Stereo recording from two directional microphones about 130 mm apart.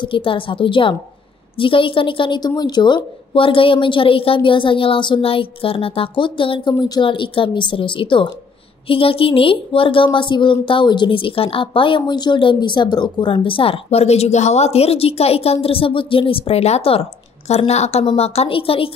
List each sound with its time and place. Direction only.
0.0 s a woman's voice: 40° left (ahead or behind)